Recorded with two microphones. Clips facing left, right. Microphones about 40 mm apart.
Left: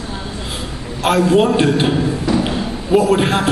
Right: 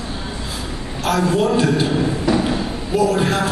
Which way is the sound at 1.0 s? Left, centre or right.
Left.